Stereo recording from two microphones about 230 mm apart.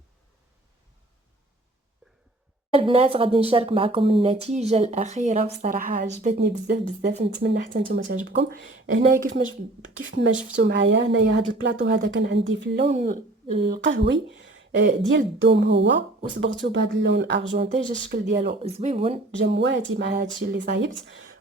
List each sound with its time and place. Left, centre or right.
2.7 s speech: right
6.7 s speech: right
9.0 s a woman's voice: right
10.0 s speech: right
12.8 s a woman's voice: right
13.7 s speech: right
18.6 s speech: right
19.5 s speech: right